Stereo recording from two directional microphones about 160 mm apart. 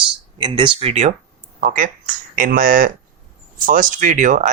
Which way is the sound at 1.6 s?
60° right (ahead or behind).